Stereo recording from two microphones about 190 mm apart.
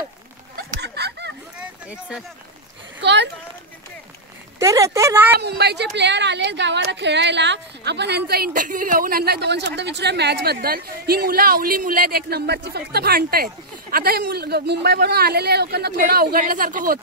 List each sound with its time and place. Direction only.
0.6 s a sound: 60° right (ahead or behind)
1.9 s speech: 5° right (ahead or behind)
3.0 s speech: 65° right (ahead or behind)
4.6 s speech: 15° right (ahead or behind)
5.4 s a woman's voice: 60° right (ahead or behind)